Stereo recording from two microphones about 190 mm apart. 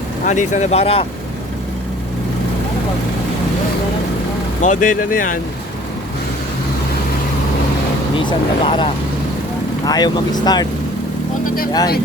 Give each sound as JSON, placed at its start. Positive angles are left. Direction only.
{"t": 0.3, "sound": "speech", "side_deg": 40}
{"t": 4.6, "sound": "speech", "side_deg": 40}
{"t": 8.1, "sound": "speech", "side_deg": 25}